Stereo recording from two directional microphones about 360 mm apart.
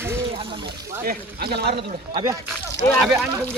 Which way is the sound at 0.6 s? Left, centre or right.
Right.